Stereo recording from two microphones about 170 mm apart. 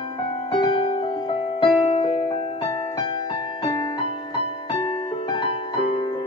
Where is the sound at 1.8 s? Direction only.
35° left (ahead or behind).